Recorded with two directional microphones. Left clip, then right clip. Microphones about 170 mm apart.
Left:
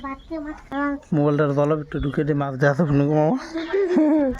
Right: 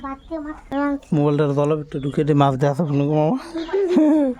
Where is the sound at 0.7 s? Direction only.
55° right (ahead or behind).